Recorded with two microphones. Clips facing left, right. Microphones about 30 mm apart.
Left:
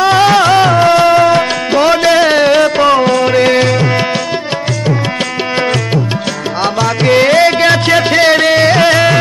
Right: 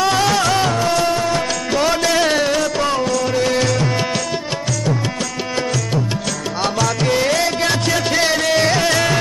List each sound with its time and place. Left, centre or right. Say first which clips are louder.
0.0 s music: left 8 dB; left
1.7 s music: left 8 dB; left
6.6 s music: left 6 dB; left
7.1 s music: left 12 dB; left